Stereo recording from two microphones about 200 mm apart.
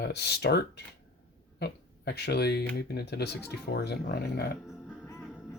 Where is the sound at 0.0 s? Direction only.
55° left (ahead or behind).